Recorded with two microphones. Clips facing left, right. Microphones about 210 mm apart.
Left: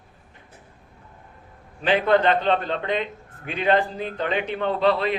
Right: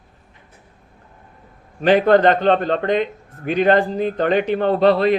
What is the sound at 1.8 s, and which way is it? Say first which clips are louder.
A man's voice: right 6 dB; 45° right (ahead or behind).